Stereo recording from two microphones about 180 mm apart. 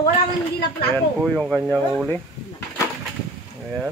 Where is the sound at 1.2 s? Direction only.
5° right (ahead or behind).